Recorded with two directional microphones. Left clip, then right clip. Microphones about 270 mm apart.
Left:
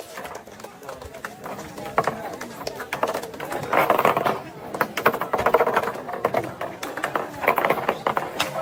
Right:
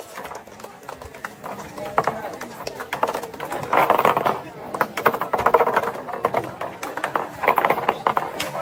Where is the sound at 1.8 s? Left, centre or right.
Centre.